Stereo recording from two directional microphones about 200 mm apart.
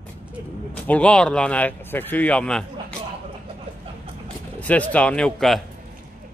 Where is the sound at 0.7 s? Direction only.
5° left (ahead or behind).